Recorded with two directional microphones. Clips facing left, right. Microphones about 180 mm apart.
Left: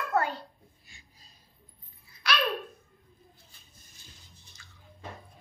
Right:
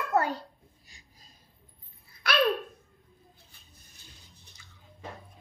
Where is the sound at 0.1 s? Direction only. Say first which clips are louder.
Right 2 dB; 40° right (ahead or behind).